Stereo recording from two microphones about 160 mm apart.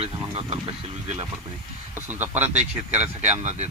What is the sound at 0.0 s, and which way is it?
Speech, 40° right (ahead or behind).